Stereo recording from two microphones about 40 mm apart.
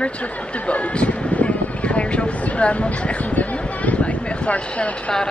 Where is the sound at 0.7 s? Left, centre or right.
Left.